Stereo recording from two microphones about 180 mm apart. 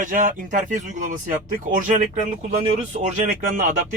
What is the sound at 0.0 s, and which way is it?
Speech, 45° right (ahead or behind).